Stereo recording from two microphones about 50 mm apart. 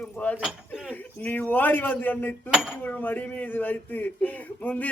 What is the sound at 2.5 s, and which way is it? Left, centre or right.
Dishes, centre.